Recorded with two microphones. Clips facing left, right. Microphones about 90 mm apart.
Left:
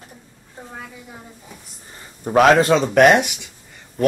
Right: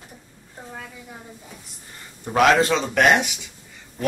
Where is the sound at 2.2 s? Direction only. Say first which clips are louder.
Left 4 dB; 45° left (ahead or behind).